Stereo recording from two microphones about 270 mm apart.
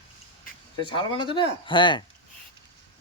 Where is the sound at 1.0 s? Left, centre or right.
Centre.